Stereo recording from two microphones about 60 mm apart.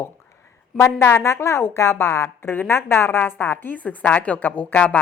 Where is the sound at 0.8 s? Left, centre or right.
Left.